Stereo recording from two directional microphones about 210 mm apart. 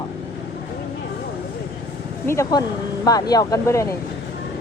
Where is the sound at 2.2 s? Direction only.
15° left (ahead or behind).